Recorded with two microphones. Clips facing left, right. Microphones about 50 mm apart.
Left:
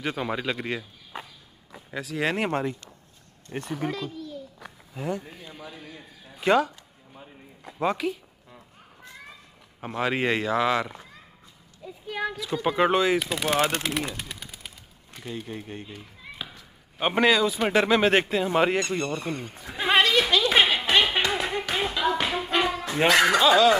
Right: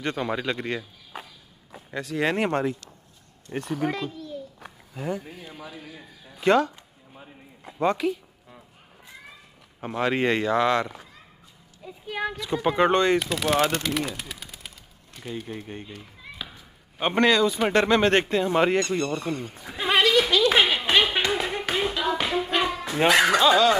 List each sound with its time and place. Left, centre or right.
0.0 s speech: centre
4.9 s speech: centre
7.2 s a sound: centre
9.8 s speech: centre
11.8 s speech: centre
12.6 s speech: centre
19.9 s a sound: left
20.9 s music: centre
21.3 s a sound: centre
21.7 s clapping: centre
23.0 s speech: centre